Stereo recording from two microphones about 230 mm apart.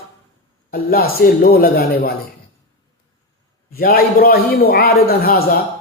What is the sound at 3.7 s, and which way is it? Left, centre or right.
Speech, left.